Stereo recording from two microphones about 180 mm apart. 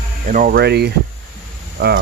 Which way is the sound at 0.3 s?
50° right (ahead or behind).